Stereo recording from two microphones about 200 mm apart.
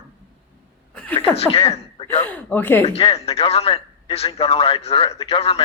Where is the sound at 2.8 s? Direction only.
30° left (ahead or behind).